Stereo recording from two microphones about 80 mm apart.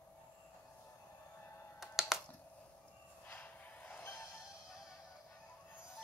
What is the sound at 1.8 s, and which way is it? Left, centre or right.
Music, centre.